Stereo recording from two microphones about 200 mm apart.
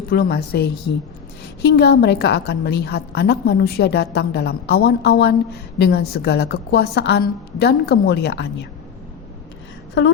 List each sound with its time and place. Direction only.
0.1 s a woman's voice: 50° left (ahead or behind)